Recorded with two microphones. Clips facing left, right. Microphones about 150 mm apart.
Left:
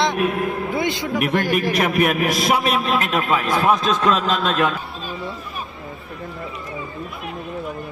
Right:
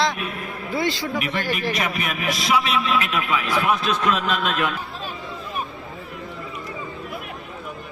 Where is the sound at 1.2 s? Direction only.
50° left (ahead or behind); by 4.7 s 30° left (ahead or behind).